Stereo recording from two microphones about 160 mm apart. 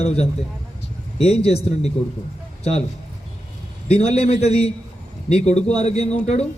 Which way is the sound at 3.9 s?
40° left (ahead or behind).